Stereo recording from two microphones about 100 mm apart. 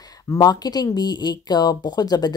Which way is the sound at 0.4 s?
40° left (ahead or behind).